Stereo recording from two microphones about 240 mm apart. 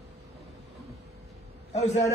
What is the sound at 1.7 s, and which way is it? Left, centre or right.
Speech, left.